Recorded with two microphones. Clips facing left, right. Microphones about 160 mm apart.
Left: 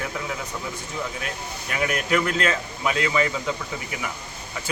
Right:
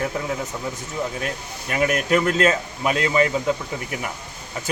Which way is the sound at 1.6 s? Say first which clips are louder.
Right 4 dB; 40° right (ahead or behind).